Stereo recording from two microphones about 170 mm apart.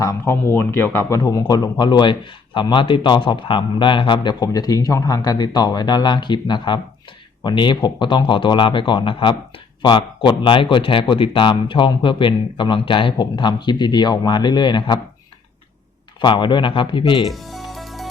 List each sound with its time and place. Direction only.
0.0 s a man's voice: 15° left (ahead or behind)
16.2 s a man's voice: 30° left (ahead or behind)
17.2 s music: centre (ahead or behind)